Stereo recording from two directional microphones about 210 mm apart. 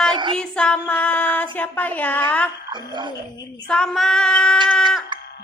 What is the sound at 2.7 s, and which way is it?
Speech, 20° right (ahead or behind).